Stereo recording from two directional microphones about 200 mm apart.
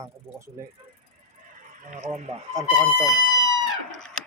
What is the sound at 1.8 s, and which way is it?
Speech, 40° right (ahead or behind).